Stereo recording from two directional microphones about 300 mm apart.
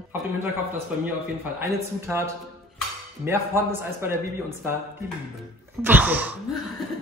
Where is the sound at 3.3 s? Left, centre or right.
Centre.